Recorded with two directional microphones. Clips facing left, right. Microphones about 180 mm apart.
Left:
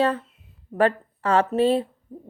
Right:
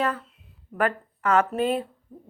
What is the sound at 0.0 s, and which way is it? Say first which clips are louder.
Speech: left 5 dB; 30° left (ahead or behind).